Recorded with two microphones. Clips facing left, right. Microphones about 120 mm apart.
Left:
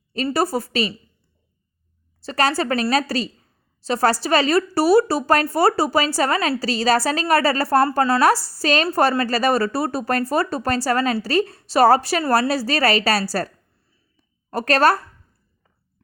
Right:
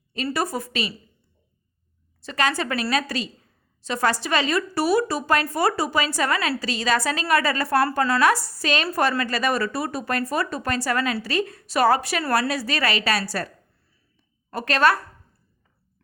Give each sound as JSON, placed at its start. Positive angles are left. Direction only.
{"t": 0.3, "sound": "a woman's voice", "side_deg": 35}
{"t": 2.2, "sound": "a woman's voice", "side_deg": 35}
{"t": 14.5, "sound": "a woman's voice", "side_deg": 40}